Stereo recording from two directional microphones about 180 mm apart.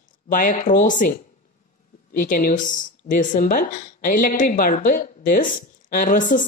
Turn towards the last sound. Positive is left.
turn(degrees=45)  # may be behind; listen again after turning